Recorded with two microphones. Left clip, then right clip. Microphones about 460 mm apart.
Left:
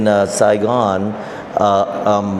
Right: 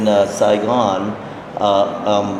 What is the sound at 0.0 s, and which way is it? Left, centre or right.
A man's voice, left.